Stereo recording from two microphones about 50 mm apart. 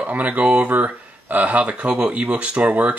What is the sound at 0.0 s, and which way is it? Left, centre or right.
Speech, right.